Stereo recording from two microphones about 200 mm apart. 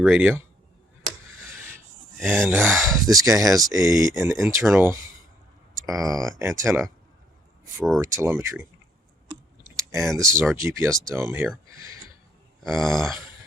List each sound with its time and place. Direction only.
0.0 s speech: 10° right (ahead or behind)
2.2 s speech: 10° right (ahead or behind)
8.0 s speech: 15° right (ahead or behind)
9.9 s speech: 15° right (ahead or behind)
12.6 s speech: centre (ahead or behind)